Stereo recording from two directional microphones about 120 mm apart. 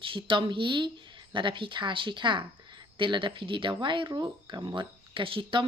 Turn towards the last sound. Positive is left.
turn(degrees=-45)  # may be behind; listen again after turning